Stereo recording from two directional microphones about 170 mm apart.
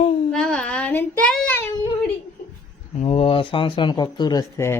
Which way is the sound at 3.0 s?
35° left (ahead or behind).